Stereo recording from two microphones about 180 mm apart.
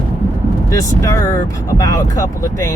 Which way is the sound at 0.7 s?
15° left (ahead or behind).